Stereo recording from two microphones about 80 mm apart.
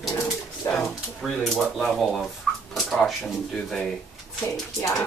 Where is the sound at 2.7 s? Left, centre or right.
Centre.